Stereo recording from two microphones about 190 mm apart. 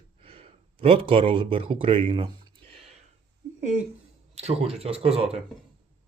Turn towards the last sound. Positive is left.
turn(degrees=-30)  # may be behind; listen again after turning